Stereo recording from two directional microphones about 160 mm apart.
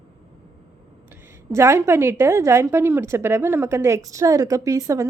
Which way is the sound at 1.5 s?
15° right (ahead or behind).